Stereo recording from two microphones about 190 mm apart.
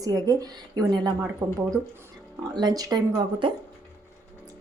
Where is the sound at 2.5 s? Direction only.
20° right (ahead or behind).